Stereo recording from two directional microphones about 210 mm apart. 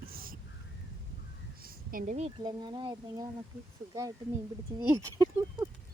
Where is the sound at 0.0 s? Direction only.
45° right (ahead or behind).